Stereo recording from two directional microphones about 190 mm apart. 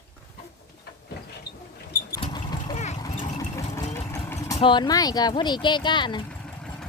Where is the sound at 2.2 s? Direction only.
25° left (ahead or behind).